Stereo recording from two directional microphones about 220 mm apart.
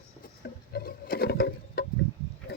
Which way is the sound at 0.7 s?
45° left (ahead or behind).